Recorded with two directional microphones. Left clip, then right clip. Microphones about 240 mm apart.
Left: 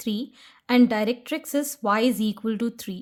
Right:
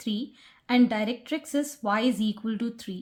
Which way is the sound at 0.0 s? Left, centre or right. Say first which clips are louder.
Left 2 dB; left.